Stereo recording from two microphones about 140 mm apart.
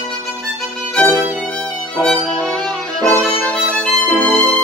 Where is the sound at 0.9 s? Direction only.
10° left (ahead or behind).